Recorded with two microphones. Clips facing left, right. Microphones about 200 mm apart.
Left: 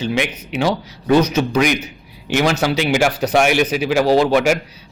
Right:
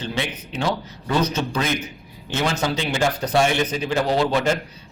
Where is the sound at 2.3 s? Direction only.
75° left (ahead or behind).